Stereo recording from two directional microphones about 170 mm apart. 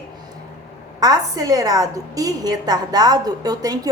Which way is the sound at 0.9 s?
20° right (ahead or behind).